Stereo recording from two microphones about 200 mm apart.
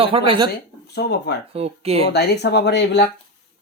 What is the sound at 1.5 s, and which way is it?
Speech, 30° right (ahead or behind).